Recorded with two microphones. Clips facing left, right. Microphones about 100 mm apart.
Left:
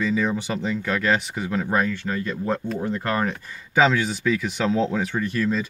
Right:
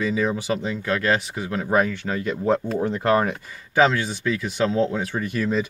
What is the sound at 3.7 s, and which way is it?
Speech, centre (ahead or behind).